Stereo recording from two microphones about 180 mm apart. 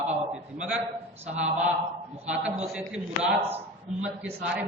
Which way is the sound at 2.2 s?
5° right (ahead or behind).